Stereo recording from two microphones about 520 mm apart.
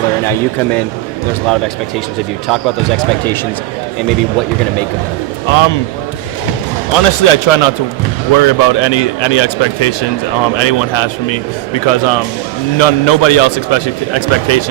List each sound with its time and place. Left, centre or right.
5.5 s a man's voice: left
6.9 s speech: left
8.3 s a man's voice: left